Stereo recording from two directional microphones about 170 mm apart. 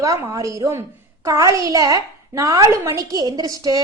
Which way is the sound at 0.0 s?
20° right (ahead or behind).